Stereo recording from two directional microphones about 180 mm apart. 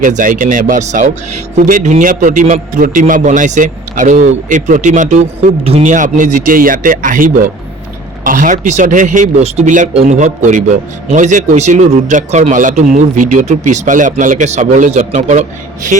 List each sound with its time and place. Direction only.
0.0 s speech: 45° right (ahead or behind)